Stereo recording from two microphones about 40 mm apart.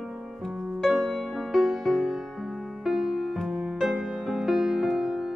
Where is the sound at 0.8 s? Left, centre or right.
Centre.